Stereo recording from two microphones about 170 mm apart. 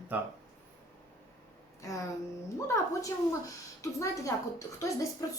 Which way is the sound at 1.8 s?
20° left (ahead or behind).